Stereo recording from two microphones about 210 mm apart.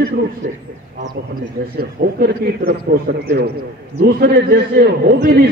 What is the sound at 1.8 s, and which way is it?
A man's voice, 45° right (ahead or behind).